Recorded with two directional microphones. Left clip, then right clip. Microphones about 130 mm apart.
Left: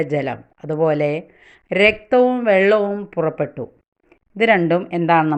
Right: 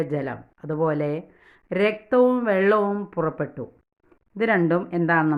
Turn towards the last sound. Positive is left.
turn(degrees=10)  # may be behind; listen again after turning